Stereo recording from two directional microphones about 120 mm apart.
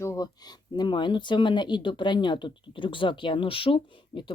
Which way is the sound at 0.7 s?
40° left (ahead or behind).